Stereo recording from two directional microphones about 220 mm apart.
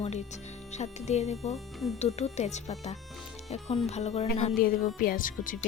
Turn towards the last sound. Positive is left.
turn(degrees=40)  # may be behind; listen again after turning